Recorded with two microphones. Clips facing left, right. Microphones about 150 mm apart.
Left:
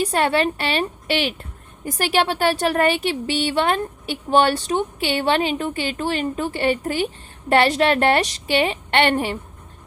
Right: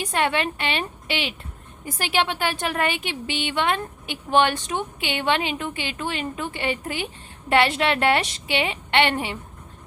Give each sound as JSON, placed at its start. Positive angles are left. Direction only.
{"t": 0.0, "sound": "a woman's voice", "side_deg": 35}